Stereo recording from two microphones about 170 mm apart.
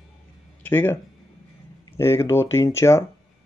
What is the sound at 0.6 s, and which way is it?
Speech, 15° left (ahead or behind).